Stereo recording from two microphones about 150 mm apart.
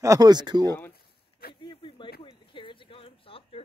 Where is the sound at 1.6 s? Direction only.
35° left (ahead or behind).